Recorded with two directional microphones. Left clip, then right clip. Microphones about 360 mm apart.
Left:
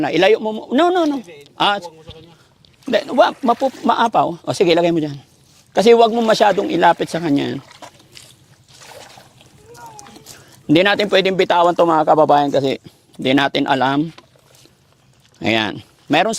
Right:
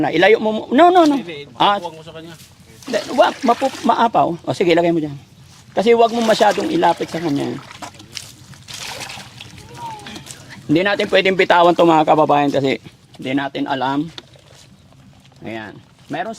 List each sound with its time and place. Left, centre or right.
0.0 s a man's voice: left
3.2 s speech: left
7.7 s a sound: right
8.1 s a sound: right
10.7 s speech: left
11.4 s speech: centre
13.2 s speech: left